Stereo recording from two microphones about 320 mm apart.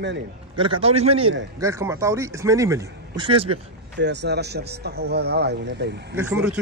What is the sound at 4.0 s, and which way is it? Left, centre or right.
Speech, right.